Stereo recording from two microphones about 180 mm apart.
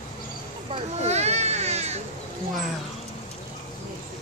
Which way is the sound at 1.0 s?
35° right (ahead or behind).